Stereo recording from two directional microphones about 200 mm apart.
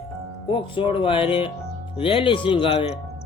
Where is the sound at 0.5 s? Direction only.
25° left (ahead or behind).